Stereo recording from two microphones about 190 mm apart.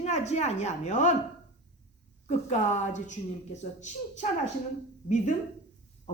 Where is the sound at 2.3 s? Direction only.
40° left (ahead or behind).